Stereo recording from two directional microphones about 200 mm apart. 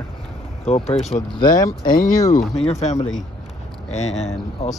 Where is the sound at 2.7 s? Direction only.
35° left (ahead or behind).